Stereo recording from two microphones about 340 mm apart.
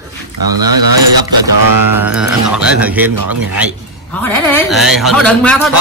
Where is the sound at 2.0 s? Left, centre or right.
Centre.